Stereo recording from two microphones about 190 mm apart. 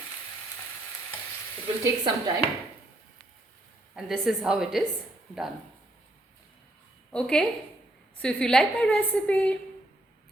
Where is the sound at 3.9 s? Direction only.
Centre (ahead or behind).